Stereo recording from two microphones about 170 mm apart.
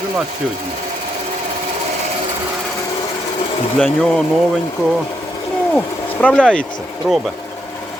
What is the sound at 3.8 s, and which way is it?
Speech, centre (ahead or behind).